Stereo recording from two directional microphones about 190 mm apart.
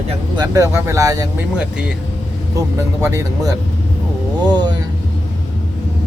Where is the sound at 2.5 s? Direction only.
15° right (ahead or behind).